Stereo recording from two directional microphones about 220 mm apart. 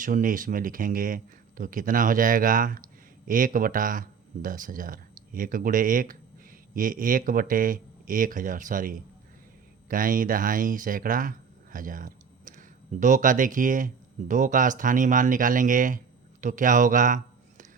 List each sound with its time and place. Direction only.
0.0 s speech: 35° right (ahead or behind)